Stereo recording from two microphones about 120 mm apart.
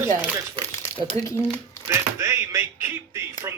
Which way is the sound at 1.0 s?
55° right (ahead or behind).